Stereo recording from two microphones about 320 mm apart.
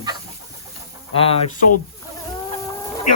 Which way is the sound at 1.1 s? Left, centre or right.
Centre.